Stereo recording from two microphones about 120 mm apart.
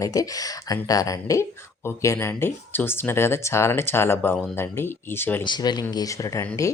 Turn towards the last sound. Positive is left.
turn(degrees=25)  # may be behind; listen again after turning